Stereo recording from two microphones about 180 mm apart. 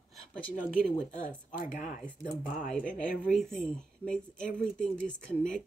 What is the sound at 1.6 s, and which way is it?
Speech, 45° left (ahead or behind).